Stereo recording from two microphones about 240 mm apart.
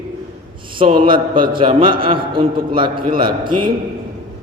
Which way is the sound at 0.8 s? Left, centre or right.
Right.